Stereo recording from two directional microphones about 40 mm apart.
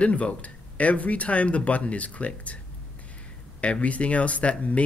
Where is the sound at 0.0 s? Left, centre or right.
Left.